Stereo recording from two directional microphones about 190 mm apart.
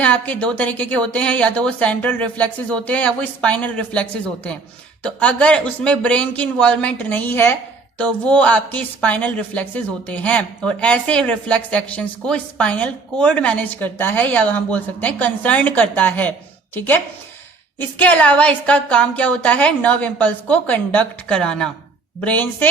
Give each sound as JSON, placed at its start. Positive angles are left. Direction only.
{"t": 0.0, "sound": "a woman's voice", "side_deg": 5}
{"t": 5.0, "sound": "a woman's voice", "side_deg": 5}